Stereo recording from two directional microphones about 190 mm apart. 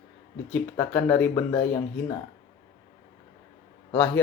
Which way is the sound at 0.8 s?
10° left (ahead or behind).